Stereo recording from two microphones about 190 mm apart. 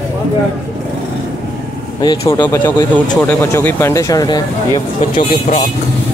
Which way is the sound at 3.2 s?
10° left (ahead or behind).